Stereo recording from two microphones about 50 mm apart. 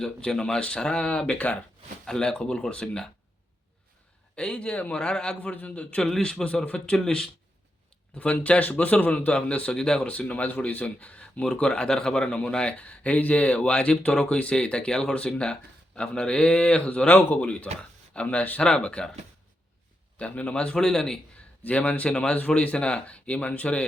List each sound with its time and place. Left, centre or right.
0.3 s speech: centre
4.4 s speech: left
5.4 s speech: left
6.0 s speech: centre
8.1 s speech: left
9.7 s speech: centre
10.0 s speech: left
20.1 s speech: left
20.8 s speech: centre
21.6 s speech: left